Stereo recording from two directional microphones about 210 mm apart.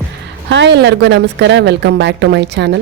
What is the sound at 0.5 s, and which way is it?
A woman's voice, 55° right (ahead or behind).